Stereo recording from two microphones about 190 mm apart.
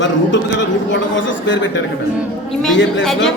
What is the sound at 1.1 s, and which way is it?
Speech, 75° left (ahead or behind).